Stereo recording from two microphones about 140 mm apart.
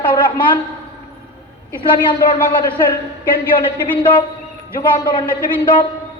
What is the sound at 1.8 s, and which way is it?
Speech, 35° left (ahead or behind).